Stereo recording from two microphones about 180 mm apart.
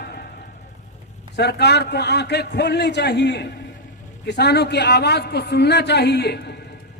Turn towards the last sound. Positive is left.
turn(degrees=65)  # may be behind; listen again after turning